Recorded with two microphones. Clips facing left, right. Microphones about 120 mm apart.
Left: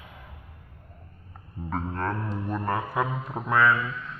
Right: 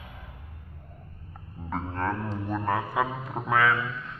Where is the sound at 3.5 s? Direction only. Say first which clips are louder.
Left 2 dB; 90° right.